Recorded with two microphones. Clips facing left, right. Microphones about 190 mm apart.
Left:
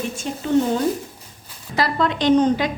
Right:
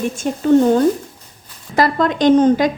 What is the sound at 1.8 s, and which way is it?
Speech, 45° right (ahead or behind).